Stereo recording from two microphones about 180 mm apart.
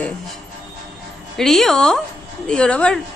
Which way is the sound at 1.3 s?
Centre (ahead or behind).